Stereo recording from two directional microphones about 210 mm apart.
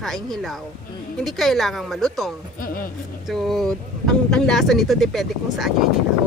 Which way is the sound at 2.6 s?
45° left (ahead or behind).